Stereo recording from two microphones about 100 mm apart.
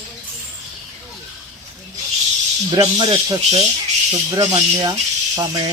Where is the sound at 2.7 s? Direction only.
45° right (ahead or behind).